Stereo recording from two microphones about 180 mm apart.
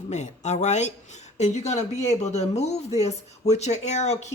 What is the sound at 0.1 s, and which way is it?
Speech, 40° left (ahead or behind).